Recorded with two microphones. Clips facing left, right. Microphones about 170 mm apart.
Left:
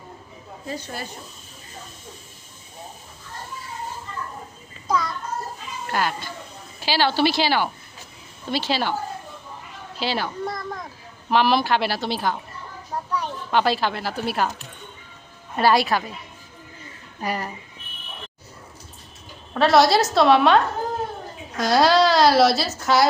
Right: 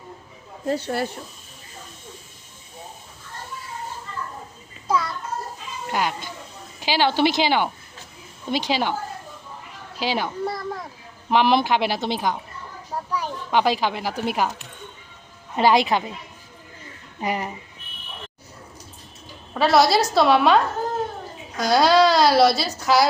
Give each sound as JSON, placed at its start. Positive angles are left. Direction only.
{"t": 0.7, "sound": "speech", "side_deg": -65}
{"t": 4.9, "sound": "a sound", "side_deg": -5}
{"t": 5.9, "sound": "speech", "side_deg": -15}
{"t": 10.0, "sound": "speech", "side_deg": -15}
{"t": 10.4, "sound": "a woman's voice", "side_deg": -5}
{"t": 11.3, "sound": "speech", "side_deg": -20}
{"t": 15.5, "sound": "a woman's voice", "side_deg": -20}
{"t": 17.2, "sound": "a woman's voice", "side_deg": -20}
{"t": 19.5, "sound": "a woman's voice", "side_deg": 0}